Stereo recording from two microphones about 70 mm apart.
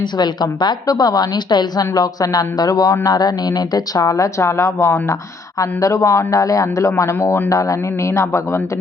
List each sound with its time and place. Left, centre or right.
0.2 s a woman's voice: left